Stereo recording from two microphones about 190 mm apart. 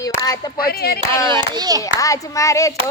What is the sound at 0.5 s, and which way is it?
Speech, 55° left (ahead or behind).